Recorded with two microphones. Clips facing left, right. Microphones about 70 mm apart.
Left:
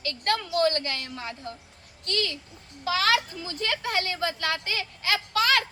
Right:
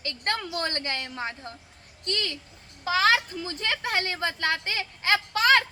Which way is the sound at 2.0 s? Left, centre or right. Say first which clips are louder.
Left 2 dB; right.